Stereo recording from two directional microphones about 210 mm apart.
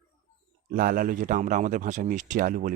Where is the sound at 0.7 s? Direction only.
40° right (ahead or behind).